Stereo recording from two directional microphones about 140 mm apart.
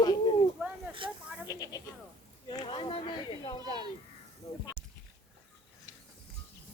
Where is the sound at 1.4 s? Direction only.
25° left (ahead or behind).